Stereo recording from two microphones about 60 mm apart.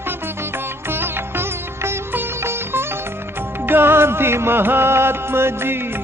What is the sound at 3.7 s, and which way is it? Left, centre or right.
Music, right.